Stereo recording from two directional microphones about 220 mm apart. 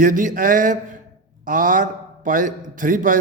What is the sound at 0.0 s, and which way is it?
A man's voice, 35° right (ahead or behind).